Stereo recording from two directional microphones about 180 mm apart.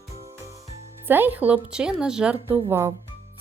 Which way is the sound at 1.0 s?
10° right (ahead or behind).